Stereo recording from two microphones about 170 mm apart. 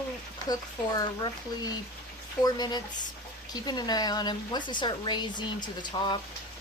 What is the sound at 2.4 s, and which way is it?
Speech, 25° left (ahead or behind).